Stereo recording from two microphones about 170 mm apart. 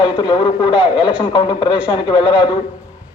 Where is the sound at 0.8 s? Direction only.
5° right (ahead or behind).